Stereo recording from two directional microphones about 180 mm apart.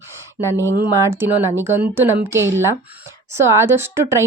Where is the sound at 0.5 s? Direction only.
15° right (ahead or behind).